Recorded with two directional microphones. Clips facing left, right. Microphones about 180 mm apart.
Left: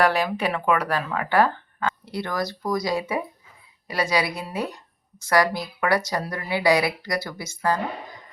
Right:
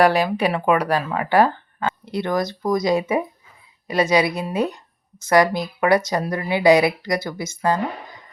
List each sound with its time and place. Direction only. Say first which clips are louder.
0.0 s speech: right 4 dB; 15° right (ahead or behind)